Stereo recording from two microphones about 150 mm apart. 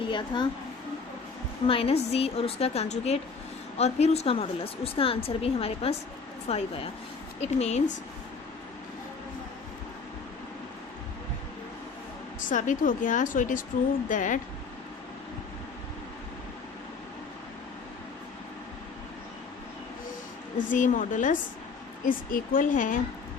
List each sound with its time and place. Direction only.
0.1 s speech: 30° left (ahead or behind)
1.6 s a woman's voice: 40° left (ahead or behind)
12.5 s speech: 60° left (ahead or behind)
20.7 s speech: 60° left (ahead or behind)